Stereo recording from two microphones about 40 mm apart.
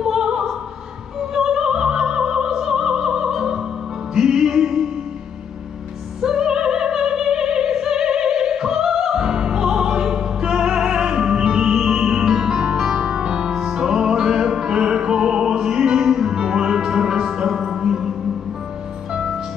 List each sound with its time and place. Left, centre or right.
0.0 s opera: centre
4.1 s music: centre
6.2 s opera: centre
17.7 s music: centre